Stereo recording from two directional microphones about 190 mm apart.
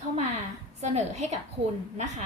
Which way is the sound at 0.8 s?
35° right (ahead or behind).